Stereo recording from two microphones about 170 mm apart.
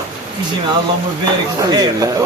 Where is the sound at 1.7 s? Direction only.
25° right (ahead or behind).